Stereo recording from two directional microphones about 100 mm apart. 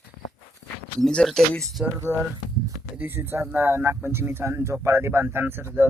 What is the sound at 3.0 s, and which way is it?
Speech, 25° right (ahead or behind).